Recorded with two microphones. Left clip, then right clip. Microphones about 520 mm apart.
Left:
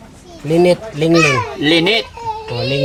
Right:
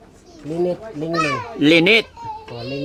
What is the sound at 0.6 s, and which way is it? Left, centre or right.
Speech, left.